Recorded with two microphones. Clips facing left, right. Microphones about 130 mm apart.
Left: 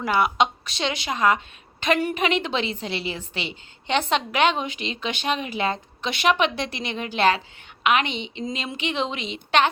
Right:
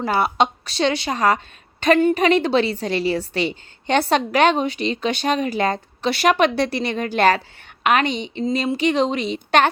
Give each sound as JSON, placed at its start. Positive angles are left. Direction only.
{"t": 0.0, "sound": "a woman's voice", "side_deg": -35}